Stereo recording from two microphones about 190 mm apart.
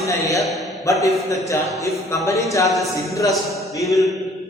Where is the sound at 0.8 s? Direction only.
15° left (ahead or behind).